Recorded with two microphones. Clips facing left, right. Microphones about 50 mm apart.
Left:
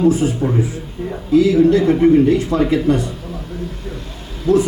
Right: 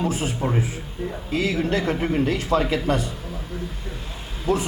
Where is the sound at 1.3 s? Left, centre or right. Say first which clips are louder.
Left 12 dB; right.